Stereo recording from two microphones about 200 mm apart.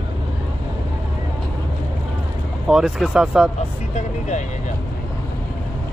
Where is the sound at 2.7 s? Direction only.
5° right (ahead or behind).